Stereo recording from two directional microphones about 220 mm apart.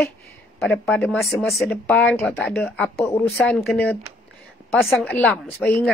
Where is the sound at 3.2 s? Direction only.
Centre (ahead or behind).